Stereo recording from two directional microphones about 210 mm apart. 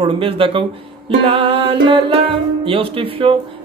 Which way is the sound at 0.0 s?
25° right (ahead or behind).